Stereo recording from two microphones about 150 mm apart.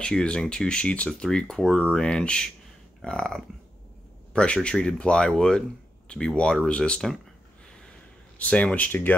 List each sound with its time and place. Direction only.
0.0 s speech: 5° left (ahead or behind)
7.6 s gasp: 5° left (ahead or behind)
8.4 s speech: 10° left (ahead or behind)